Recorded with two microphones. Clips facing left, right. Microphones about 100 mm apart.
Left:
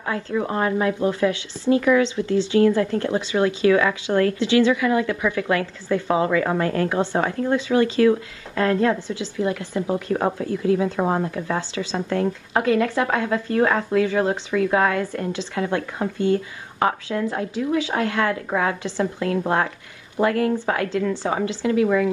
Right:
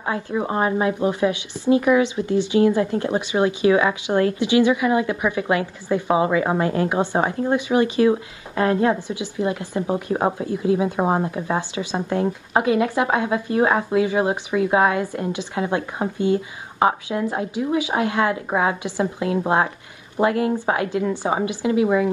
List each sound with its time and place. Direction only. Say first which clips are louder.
0.0 s speech: even; 25° right (ahead or behind)